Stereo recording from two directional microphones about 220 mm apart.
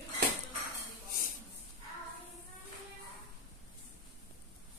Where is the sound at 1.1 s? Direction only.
40° left (ahead or behind).